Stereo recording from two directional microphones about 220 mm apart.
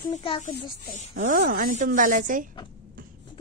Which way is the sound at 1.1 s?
35° right (ahead or behind).